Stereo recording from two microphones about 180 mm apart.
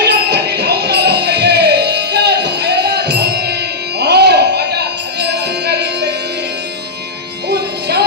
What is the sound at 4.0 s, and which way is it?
Music, 65° right (ahead or behind).